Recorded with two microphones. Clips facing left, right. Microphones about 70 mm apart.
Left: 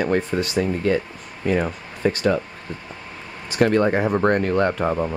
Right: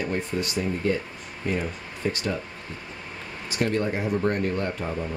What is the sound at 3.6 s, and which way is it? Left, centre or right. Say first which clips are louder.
Speech: left 8 dB; left.